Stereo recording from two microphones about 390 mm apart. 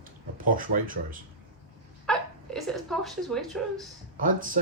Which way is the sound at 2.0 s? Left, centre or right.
Centre.